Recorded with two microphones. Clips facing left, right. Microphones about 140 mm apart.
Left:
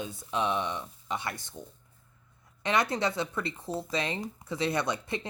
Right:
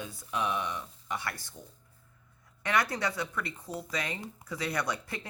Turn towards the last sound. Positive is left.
turn(degrees=20)  # may be behind; listen again after turning